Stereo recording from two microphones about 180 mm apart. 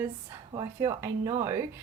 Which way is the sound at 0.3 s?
20° right (ahead or behind).